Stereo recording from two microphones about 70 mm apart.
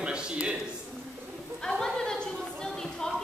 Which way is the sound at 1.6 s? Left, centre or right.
Centre.